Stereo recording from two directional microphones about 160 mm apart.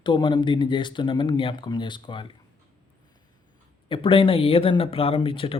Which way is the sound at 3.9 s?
35° left (ahead or behind).